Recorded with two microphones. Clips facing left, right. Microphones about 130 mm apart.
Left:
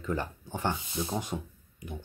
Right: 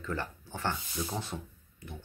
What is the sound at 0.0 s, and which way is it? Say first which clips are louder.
Speech: left 3 dB; 15° left (ahead or behind).